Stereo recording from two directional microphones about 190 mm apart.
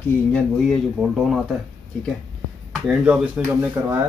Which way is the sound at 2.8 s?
5° right (ahead or behind).